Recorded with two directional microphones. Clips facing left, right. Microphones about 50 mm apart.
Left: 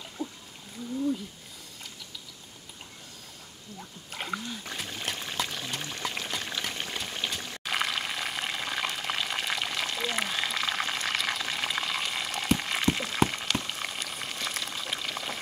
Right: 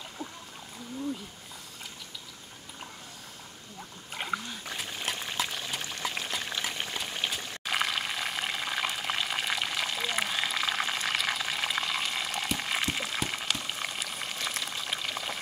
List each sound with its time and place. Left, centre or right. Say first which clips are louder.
0.2 s whale vocalization: left 5 dB; right
4.1 s trickle: right 1 dB; centre
13.3 s frying: left 1 dB; centre